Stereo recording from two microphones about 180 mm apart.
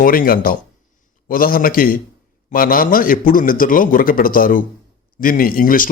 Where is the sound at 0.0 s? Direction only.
55° left (ahead or behind).